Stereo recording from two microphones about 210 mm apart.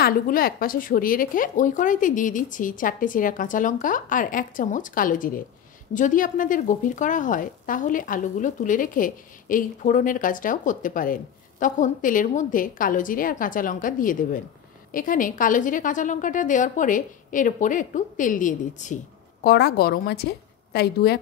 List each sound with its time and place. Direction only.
0.0 s speech: 45° left (ahead or behind)
19.4 s a woman's voice: 50° left (ahead or behind)